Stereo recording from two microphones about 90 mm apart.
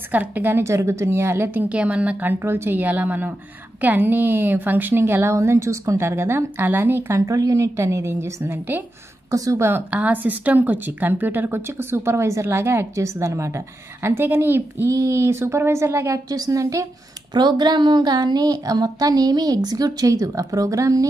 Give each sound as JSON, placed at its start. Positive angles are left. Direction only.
{"t": 0.1, "sound": "a woman's voice", "side_deg": -20}
{"t": 9.3, "sound": "speech", "side_deg": -40}
{"t": 9.7, "sound": "a woman's voice", "side_deg": -20}
{"t": 14.9, "sound": "speech", "side_deg": -35}
{"t": 16.3, "sound": "a woman's voice", "side_deg": -45}
{"t": 17.3, "sound": "a woman's voice", "side_deg": -55}